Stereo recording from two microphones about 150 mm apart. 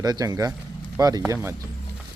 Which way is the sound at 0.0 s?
25° right (ahead or behind).